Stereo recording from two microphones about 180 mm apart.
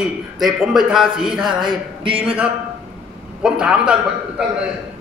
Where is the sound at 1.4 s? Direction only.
25° right (ahead or behind).